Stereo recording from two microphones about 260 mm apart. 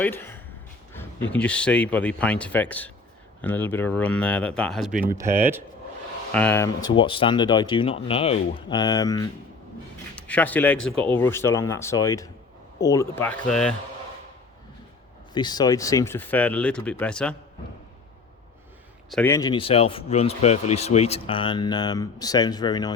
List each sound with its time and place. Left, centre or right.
0.0 s speech: centre
6.3 s speech: centre
15.3 s speech: centre
19.1 s speech: centre